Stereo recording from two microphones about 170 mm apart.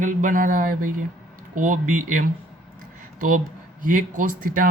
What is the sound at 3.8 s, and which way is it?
Speech, 50° right (ahead or behind).